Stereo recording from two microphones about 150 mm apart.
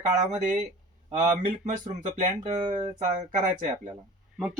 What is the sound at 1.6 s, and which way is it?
Speech, 55° right (ahead or behind).